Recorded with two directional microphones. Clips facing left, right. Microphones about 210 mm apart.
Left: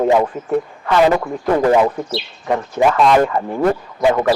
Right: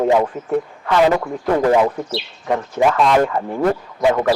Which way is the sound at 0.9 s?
15° left (ahead or behind).